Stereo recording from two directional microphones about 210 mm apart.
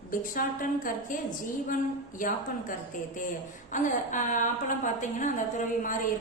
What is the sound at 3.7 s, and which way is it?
A woman's voice, 35° left (ahead or behind).